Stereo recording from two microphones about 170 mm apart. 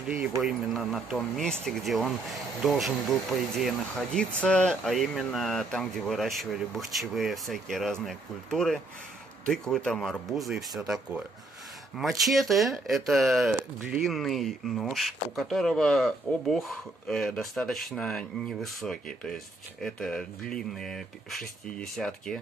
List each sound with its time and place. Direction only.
0.4 s speech: centre (ahead or behind)